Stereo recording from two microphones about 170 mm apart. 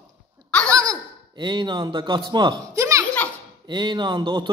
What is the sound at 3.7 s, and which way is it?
Speech, 25° right (ahead or behind).